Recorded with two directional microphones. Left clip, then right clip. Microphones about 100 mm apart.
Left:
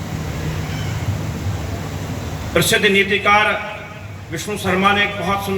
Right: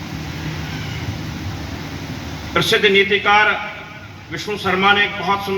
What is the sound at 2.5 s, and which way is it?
A man's voice, 25° left (ahead or behind).